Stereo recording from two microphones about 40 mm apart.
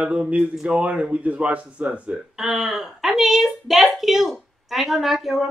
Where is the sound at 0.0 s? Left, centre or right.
Right.